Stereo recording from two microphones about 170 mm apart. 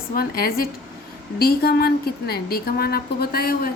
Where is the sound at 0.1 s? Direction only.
60° left (ahead or behind).